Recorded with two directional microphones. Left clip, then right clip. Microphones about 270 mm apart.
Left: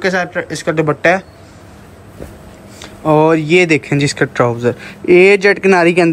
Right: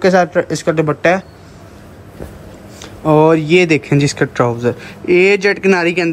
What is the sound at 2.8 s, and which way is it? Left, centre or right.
A man's voice, centre.